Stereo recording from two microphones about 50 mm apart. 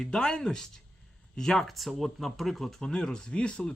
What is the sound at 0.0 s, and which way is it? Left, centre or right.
Speech, centre.